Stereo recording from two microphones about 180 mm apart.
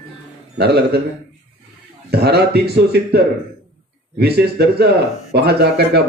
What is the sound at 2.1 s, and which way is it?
Speech, 65° right (ahead or behind).